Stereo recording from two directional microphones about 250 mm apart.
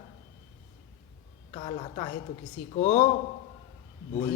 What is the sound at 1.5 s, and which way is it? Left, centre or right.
A man's voice, left.